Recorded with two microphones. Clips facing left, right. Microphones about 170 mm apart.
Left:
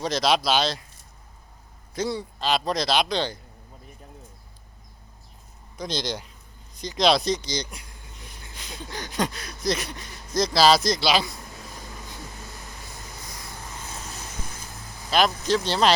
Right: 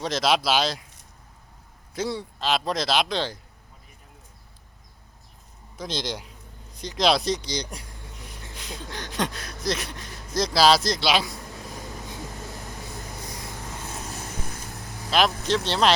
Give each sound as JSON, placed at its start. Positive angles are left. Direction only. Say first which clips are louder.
{"t": 0.0, "sound": "speech", "louder": "even", "side_deg": 0}
{"t": 2.0, "sound": "speech", "louder": "left 1 dB", "side_deg": 0}
{"t": 5.7, "sound": "speech", "louder": "left 1 dB", "side_deg": 0}
{"t": 8.3, "sound": "a sound", "louder": "right 3 dB", "side_deg": 0}
{"t": 11.6, "sound": "vehicle", "louder": "right 4 dB", "side_deg": -20}
{"t": 15.4, "sound": "speech", "louder": "left 1 dB", "side_deg": 0}